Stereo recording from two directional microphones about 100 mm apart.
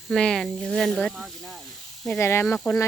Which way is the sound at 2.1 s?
25° left (ahead or behind).